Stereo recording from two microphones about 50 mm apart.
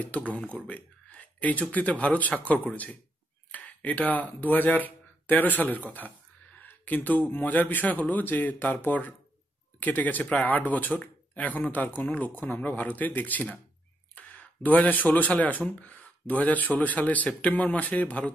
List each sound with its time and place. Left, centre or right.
0.0 s speech: left
14.1 s a sound: left
15.4 s speech: left